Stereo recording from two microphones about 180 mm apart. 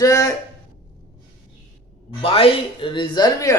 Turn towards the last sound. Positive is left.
turn(degrees=20)  # may be behind; listen again after turning